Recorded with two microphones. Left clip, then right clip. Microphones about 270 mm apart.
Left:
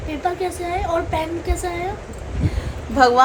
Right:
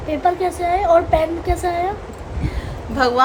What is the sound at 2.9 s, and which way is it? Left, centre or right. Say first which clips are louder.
Speech: left 2 dB; centre.